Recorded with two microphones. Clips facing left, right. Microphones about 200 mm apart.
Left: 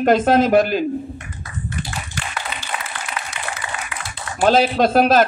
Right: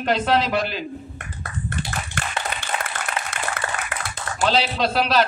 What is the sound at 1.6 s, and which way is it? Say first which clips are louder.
Clapping: even; 55° right (ahead or behind).